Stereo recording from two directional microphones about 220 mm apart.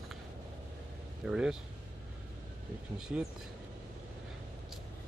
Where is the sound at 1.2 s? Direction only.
Centre (ahead or behind).